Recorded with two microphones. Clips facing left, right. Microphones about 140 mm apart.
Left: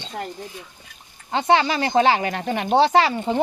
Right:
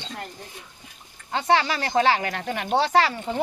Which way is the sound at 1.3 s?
20° left (ahead or behind).